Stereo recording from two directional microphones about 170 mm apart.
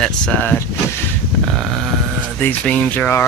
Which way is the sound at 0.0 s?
10° left (ahead or behind).